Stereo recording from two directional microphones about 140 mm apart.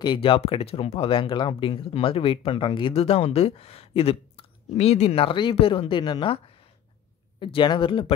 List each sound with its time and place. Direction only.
0.0 s speech: 35° left (ahead or behind)